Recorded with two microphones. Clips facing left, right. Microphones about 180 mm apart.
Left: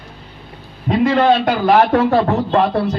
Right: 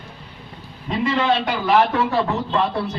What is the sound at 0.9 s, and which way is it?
A man's voice, 55° left (ahead or behind).